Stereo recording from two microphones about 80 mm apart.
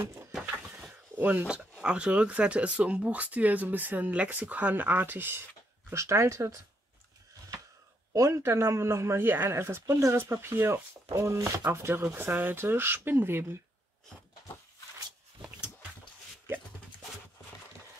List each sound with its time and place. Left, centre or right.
1.2 s speech: centre
5.9 s a man's voice: right
8.1 s a man's voice: right